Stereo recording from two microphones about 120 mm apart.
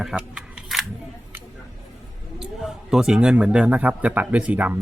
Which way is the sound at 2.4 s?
5° right (ahead or behind).